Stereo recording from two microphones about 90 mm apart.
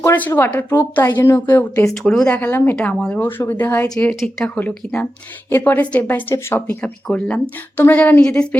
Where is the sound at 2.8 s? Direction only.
10° left (ahead or behind).